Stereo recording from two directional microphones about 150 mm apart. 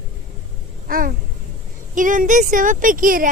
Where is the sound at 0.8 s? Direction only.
70° right (ahead or behind).